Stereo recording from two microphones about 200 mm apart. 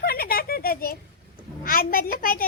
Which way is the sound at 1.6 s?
45° left (ahead or behind).